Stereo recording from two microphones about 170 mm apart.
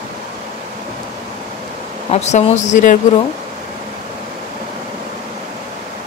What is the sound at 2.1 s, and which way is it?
Speech, 40° left (ahead or behind).